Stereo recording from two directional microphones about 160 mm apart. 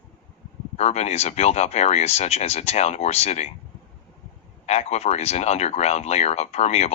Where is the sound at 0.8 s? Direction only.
45° left (ahead or behind).